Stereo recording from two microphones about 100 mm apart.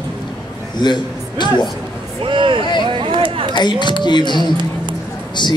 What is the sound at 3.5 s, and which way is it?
Speech, 50° left (ahead or behind).